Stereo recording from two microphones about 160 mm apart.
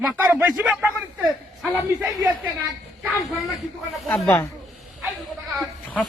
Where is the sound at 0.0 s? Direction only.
10° right (ahead or behind).